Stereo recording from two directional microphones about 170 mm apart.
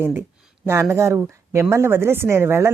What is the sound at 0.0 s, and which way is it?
A woman's voice, 15° right (ahead or behind).